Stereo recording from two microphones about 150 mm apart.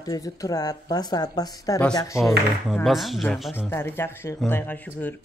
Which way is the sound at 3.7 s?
15° left (ahead or behind).